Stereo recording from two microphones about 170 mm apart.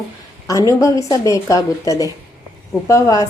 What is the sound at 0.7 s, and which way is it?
Speech, 20° left (ahead or behind).